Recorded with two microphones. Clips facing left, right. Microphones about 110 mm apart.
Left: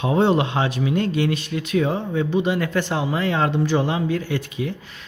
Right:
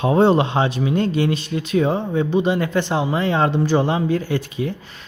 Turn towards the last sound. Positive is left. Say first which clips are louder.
# right 3 dB
turn(degrees=-35)  # may be behind; listen again after turning